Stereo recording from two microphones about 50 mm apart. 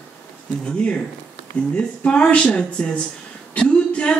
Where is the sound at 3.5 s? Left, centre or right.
Left.